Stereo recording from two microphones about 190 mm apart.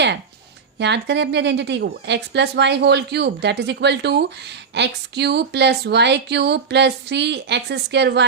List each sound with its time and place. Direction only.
0.8 s speech: 65° right (ahead or behind)